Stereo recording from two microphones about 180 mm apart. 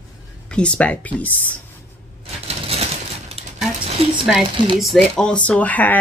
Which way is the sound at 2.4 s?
35° right (ahead or behind).